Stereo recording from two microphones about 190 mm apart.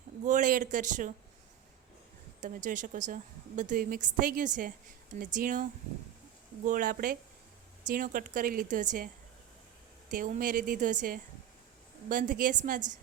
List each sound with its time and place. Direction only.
0.3 s a woman's voice: 40° right (ahead or behind)
2.4 s a woman's voice: 45° right (ahead or behind)
6.7 s a woman's voice: 45° right (ahead or behind)
10.1 s a woman's voice: 45° right (ahead or behind)